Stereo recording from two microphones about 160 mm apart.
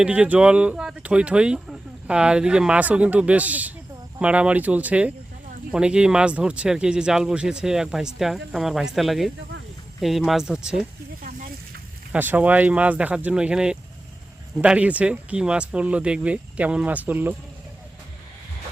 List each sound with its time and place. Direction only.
0.0 s speech: 5° right (ahead or behind)
11.2 s a sound: 60° right (ahead or behind)
12.1 s speech: 10° right (ahead or behind)